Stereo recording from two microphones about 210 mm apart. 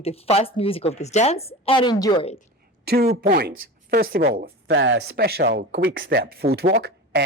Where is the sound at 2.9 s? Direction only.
50° right (ahead or behind).